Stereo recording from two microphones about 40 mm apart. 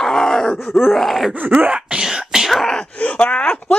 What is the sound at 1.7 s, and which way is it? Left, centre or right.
Throat clearing, centre.